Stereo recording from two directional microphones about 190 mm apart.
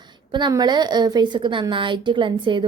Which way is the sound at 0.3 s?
25° right (ahead or behind).